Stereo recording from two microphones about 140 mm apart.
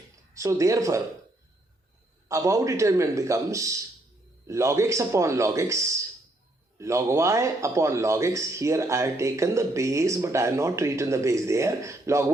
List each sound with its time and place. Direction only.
0.3 s a man's voice: 20° right (ahead or behind)
2.3 s a man's voice: 25° right (ahead or behind)